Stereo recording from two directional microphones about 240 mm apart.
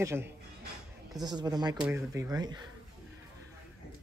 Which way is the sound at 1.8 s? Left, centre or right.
Centre.